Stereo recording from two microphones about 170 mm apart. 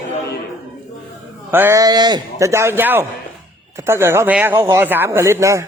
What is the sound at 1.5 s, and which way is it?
Speech, 15° right (ahead or behind).